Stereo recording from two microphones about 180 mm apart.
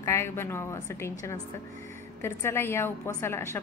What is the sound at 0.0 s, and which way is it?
A woman's voice, 15° left (ahead or behind).